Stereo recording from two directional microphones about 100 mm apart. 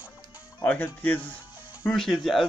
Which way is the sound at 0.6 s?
15° left (ahead or behind).